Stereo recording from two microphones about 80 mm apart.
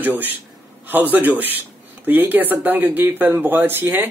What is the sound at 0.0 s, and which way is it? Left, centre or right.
A man's voice, right.